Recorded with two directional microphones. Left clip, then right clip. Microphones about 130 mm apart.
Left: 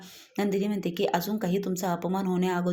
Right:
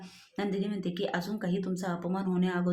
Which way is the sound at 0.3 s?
35° left (ahead or behind).